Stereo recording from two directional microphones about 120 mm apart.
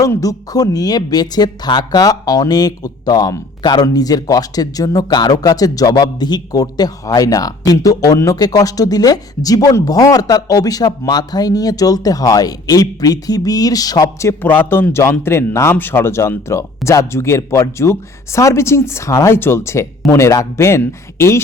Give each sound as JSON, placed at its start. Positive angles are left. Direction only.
{"t": 0.0, "sound": "a man's voice", "side_deg": 30}